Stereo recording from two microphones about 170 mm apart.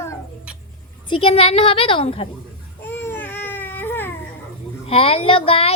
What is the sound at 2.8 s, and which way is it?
Baby cry, 15° left (ahead or behind).